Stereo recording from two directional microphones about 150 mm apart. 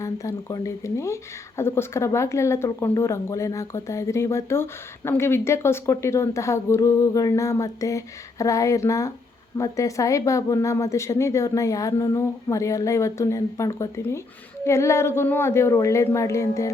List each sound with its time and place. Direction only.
0.0 s speech: 20° left (ahead or behind)